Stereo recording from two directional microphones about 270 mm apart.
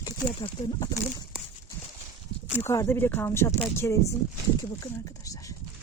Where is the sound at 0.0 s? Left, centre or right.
Centre.